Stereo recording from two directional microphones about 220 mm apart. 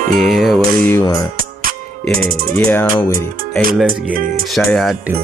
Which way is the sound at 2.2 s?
40° right (ahead or behind).